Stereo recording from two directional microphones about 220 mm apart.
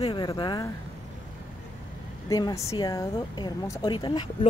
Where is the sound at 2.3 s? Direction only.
15° left (ahead or behind).